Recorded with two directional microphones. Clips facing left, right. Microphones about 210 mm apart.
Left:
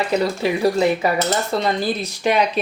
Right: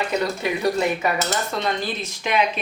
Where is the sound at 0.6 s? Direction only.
30° left (ahead or behind).